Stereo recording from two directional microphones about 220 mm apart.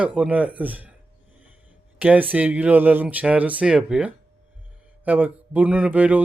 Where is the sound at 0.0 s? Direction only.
5° right (ahead or behind).